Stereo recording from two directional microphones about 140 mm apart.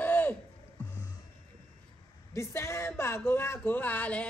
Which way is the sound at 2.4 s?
20° left (ahead or behind).